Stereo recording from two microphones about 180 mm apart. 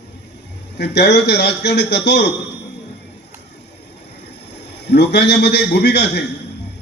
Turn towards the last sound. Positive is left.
turn(degrees=65)  # may be behind; listen again after turning